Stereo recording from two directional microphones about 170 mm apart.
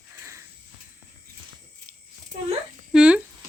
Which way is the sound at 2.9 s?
5° right (ahead or behind).